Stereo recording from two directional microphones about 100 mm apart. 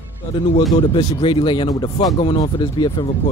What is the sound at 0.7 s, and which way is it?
Speech, 60° left (ahead or behind).